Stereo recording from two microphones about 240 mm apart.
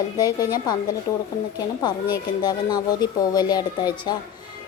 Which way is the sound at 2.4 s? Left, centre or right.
Centre.